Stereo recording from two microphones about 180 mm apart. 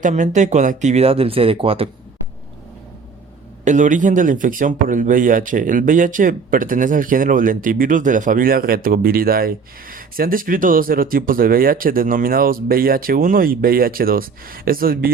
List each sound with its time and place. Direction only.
0.0 s speech: 40° right (ahead or behind)
3.6 s speech: 45° right (ahead or behind)